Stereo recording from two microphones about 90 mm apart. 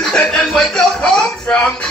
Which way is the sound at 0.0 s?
10° left (ahead or behind).